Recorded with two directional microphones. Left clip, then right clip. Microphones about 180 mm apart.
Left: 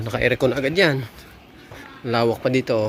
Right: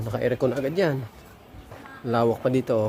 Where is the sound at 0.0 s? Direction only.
5° left (ahead or behind).